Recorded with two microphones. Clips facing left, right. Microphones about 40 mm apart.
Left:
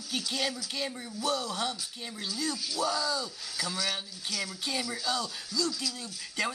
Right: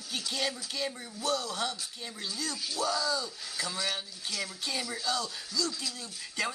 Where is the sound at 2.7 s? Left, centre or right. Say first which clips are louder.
Right 1 dB; centre.